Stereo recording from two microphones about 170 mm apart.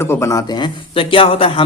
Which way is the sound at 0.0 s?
15° left (ahead or behind).